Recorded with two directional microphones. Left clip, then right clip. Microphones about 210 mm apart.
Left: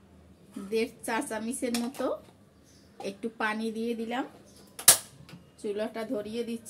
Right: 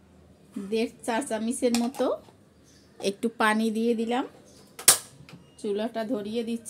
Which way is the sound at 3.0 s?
55° right (ahead or behind).